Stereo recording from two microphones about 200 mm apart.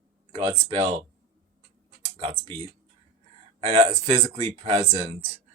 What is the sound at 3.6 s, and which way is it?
Speech, 30° right (ahead or behind).